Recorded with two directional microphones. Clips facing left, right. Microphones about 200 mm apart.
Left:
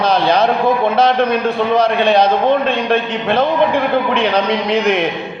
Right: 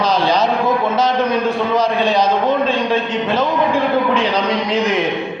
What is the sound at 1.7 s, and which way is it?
Speech, 60° left (ahead or behind).